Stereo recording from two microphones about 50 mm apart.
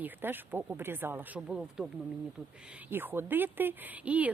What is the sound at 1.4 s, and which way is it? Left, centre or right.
Speech, centre.